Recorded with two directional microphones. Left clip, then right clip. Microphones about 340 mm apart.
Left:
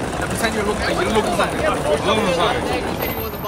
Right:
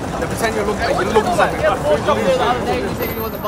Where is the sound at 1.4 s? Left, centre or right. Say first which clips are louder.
Right 4 dB; right.